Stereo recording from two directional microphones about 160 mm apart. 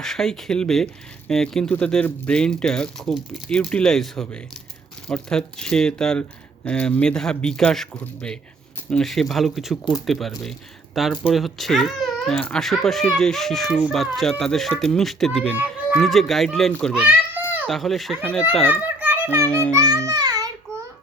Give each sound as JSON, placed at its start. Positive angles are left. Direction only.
{"t": 0.0, "sound": "speech", "side_deg": 5}
{"t": 16.9, "sound": "a sound", "side_deg": -10}
{"t": 17.7, "sound": "speech", "side_deg": 0}
{"t": 18.7, "sound": "children playing", "side_deg": -10}
{"t": 19.5, "sound": "a child's voice", "side_deg": 10}
{"t": 19.7, "sound": "a child's voice", "side_deg": -20}